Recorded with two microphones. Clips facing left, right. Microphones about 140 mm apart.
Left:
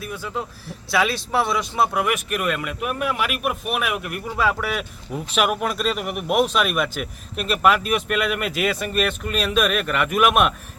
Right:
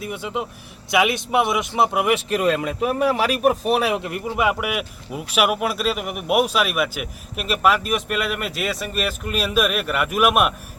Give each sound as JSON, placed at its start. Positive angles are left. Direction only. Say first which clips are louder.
{"t": 0.0, "sound": "speech", "louder": "right 2 dB", "side_deg": -20}